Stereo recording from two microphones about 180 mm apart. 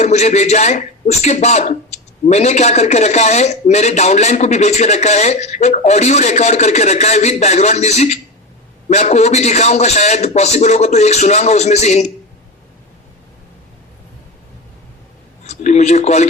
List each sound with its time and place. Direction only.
0.0 s speech: 40° left (ahead or behind)
15.4 s speech: 40° left (ahead or behind)